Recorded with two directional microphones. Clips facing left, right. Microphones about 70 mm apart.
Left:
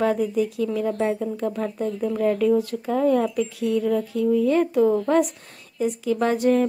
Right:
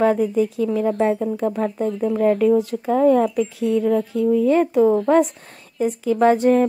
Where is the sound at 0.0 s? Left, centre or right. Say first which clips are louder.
Right 4 dB; right.